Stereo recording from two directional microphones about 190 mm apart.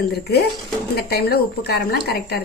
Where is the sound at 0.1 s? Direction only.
55° left (ahead or behind).